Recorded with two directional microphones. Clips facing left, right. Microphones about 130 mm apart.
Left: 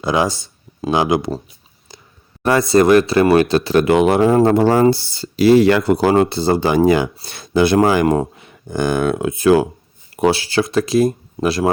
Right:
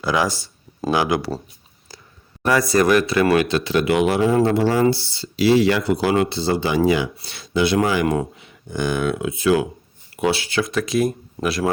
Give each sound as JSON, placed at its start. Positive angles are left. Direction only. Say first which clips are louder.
{"t": 0.0, "sound": "speech", "louder": "left 3 dB", "side_deg": 20}
{"t": 1.9, "sound": "a sound", "louder": "left 1 dB", "side_deg": 20}
{"t": 2.4, "sound": "speech", "louder": "left 4 dB", "side_deg": 25}
{"t": 8.0, "sound": "speech", "louder": "left 5 dB", "side_deg": 35}
{"t": 8.4, "sound": "speech", "louder": "left 4 dB", "side_deg": 50}
{"t": 10.2, "sound": "speech", "louder": "left 5 dB", "side_deg": 35}